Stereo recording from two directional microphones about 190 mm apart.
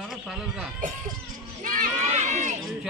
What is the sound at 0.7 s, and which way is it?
Speech, 45° right (ahead or behind).